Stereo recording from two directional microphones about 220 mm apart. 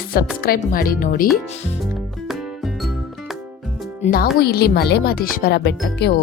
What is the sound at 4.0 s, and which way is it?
Speech, 40° left (ahead or behind).